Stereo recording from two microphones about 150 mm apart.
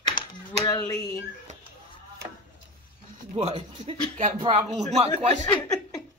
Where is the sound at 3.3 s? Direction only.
45° right (ahead or behind).